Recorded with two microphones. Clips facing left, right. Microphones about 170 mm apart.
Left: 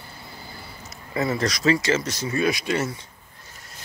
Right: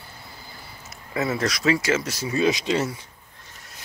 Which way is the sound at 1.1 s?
5° right (ahead or behind).